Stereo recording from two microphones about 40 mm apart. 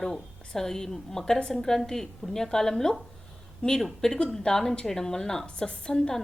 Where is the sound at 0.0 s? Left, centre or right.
Centre.